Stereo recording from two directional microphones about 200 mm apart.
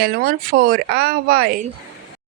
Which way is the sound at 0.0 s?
50° right (ahead or behind).